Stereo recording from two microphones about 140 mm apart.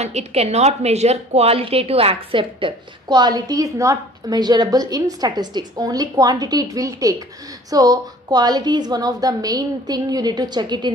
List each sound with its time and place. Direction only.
0.0 s a woman's voice: 50° right (ahead or behind); by 10.9 s 30° right (ahead or behind)